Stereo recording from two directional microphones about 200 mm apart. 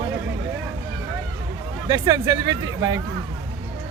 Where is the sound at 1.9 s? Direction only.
20° right (ahead or behind).